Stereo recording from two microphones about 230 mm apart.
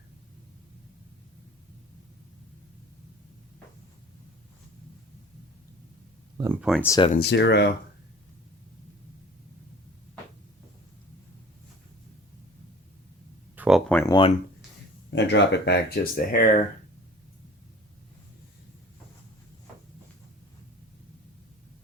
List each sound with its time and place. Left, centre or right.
6.6 s speech: centre
6.8 s speech: centre
7.1 s speech: left
13.6 s a sound: centre
15.1 s speech: left